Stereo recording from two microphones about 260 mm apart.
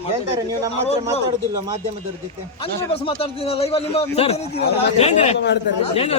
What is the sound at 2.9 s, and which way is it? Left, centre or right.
Speech, left.